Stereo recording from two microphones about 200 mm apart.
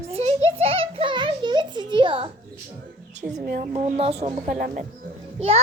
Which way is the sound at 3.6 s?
35° right (ahead or behind).